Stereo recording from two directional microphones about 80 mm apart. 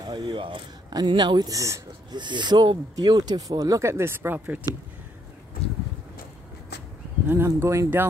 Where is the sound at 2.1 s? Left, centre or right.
Right.